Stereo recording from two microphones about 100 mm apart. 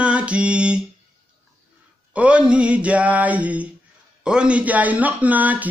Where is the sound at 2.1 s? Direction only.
10° right (ahead or behind).